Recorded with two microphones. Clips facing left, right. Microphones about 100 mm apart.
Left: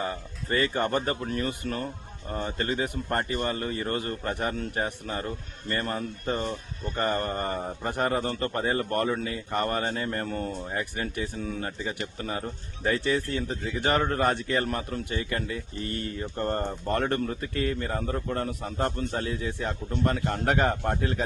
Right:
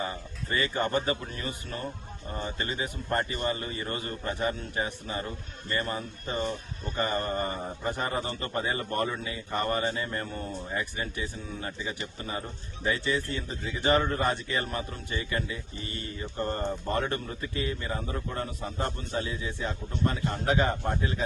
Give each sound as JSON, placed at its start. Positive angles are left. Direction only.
{"t": 0.5, "sound": "a man's voice", "side_deg": 50}